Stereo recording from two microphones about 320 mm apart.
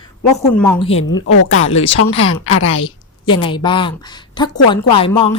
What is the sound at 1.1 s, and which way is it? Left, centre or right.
Speech, left.